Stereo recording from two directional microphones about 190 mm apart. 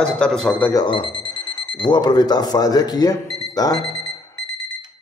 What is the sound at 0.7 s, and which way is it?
Speech, 25° left (ahead or behind).